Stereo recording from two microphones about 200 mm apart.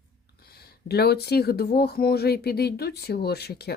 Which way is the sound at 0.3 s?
50° left (ahead or behind).